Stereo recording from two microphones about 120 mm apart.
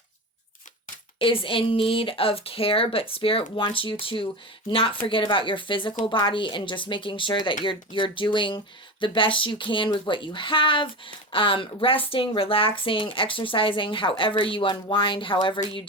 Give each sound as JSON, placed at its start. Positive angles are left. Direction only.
{"t": 1.2, "sound": "speech", "side_deg": 50}